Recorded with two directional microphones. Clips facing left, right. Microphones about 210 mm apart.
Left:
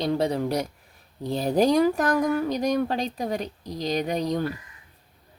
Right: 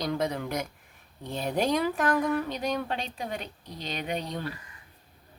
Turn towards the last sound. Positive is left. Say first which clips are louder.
# left 7 dB
turn(degrees=40)  # may be behind; listen again after turning